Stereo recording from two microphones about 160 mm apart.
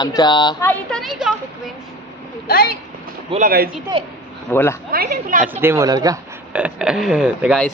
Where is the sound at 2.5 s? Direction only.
70° left (ahead or behind).